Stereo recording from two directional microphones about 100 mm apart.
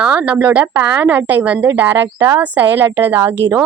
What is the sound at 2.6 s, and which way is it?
A woman's voice, 20° right (ahead or behind).